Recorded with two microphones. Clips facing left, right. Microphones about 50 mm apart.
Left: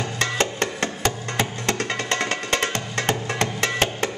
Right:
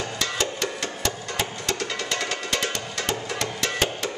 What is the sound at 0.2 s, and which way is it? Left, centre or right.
Music, left.